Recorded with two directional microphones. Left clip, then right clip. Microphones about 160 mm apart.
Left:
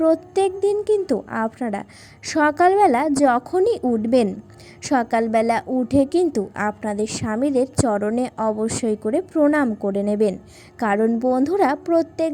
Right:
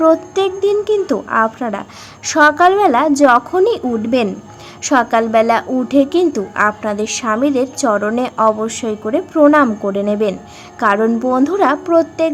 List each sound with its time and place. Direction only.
0.0 s speech: 20° left (ahead or behind)